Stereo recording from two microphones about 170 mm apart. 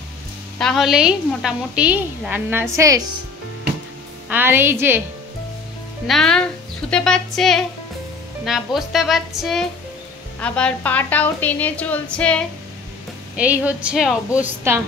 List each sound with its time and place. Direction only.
0.6 s a woman's voice: centre (ahead or behind); by 3.0 s 20° right (ahead or behind)
4.3 s a woman's voice: 10° right (ahead or behind)
6.0 s a woman's voice: 5° left (ahead or behind)
13.4 s a woman's voice: 10° right (ahead or behind)